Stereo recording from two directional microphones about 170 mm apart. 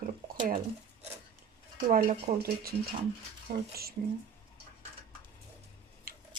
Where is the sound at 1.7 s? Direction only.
55° right (ahead or behind).